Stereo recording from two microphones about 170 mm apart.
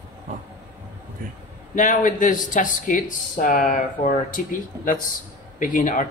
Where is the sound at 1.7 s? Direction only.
50° left (ahead or behind).